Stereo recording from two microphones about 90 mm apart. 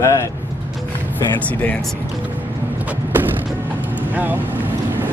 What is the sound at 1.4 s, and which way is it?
Speech, 15° left (ahead or behind).